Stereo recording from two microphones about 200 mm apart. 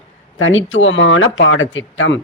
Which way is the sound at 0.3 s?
75° left (ahead or behind).